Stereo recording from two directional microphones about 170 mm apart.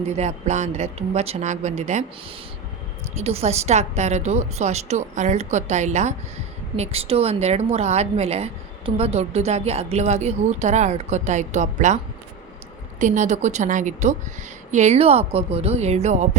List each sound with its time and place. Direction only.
0.2 s speech: 40° right (ahead or behind)
3.2 s a woman's voice: 40° right (ahead or behind)
13.0 s a woman's voice: 45° right (ahead or behind)